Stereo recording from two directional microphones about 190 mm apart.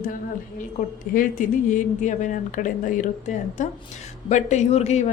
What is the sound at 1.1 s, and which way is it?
A woman's voice, 45° left (ahead or behind).